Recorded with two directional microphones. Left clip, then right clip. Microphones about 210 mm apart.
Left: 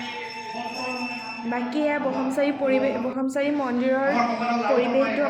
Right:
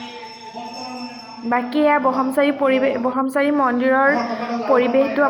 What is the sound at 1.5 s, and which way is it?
A woman's voice, 15° right (ahead or behind).